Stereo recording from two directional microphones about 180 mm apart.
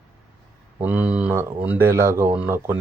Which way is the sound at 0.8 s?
10° right (ahead or behind).